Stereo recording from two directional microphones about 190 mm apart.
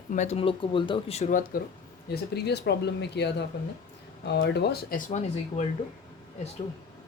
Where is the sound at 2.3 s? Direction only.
60° left (ahead or behind); by 5.6 s 40° left (ahead or behind).